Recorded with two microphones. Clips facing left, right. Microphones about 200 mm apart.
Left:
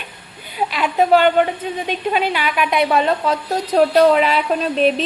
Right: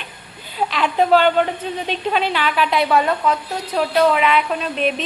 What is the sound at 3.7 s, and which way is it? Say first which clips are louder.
Speech: left 4 dB; 40° left (ahead or behind).